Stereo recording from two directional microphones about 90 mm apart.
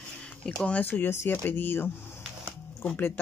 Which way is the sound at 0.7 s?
20° left (ahead or behind).